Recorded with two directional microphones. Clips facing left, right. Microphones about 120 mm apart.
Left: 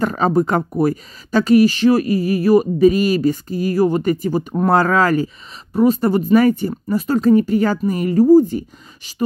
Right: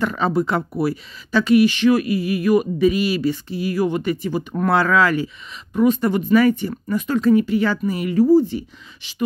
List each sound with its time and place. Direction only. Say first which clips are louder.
0.0 s speech: left 3 dB; 40° left (ahead or behind)